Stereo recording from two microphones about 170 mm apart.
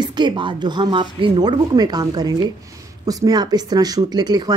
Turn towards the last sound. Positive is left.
turn(degrees=-25)  # may be behind; listen again after turning